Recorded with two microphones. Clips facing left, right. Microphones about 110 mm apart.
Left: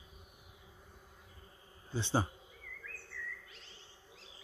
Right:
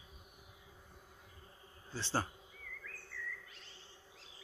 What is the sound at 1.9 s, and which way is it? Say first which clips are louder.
Speech: left 4 dB; 15° left (ahead or behind).